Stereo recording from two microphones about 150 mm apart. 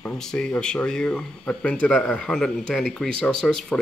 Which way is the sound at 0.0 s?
5° left (ahead or behind).